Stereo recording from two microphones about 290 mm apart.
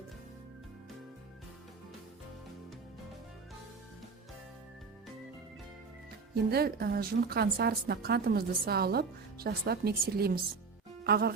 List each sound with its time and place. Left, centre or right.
6.3 s a woman's voice: right